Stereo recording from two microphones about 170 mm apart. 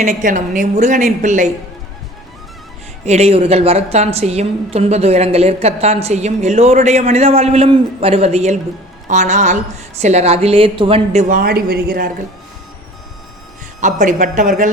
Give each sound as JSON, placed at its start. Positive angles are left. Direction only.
{"t": 0.0, "sound": "a woman's voice", "side_deg": -45}
{"t": 3.0, "sound": "a woman's voice", "side_deg": -40}
{"t": 13.8, "sound": "a woman's voice", "side_deg": -45}